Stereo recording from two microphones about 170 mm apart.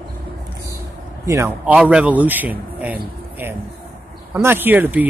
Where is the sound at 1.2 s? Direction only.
15° right (ahead or behind).